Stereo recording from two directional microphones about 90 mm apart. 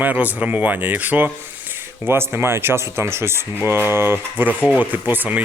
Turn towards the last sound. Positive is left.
turn(degrees=-20)  # may be behind; listen again after turning